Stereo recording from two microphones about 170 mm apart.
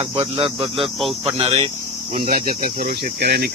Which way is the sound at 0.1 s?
35° right (ahead or behind).